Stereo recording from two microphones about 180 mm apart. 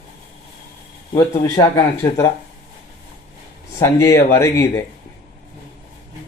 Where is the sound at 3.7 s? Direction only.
15° left (ahead or behind).